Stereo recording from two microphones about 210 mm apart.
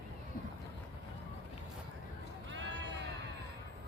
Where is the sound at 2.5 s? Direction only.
60° right (ahead or behind).